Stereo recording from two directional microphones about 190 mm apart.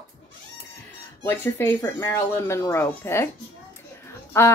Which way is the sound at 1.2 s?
10° left (ahead or behind).